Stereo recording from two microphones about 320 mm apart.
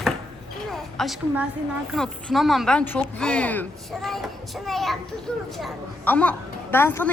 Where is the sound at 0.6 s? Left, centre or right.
Centre.